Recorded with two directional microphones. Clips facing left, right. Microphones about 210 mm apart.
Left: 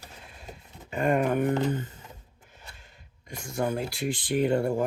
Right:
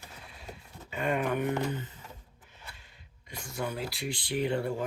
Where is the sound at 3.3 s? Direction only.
45° left (ahead or behind).